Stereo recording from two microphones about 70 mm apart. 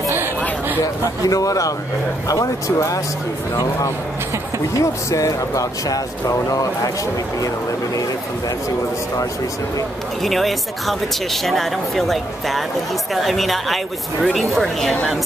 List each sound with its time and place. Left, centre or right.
0.8 s speech: left
4.7 s speech: left
10.2 s speech: centre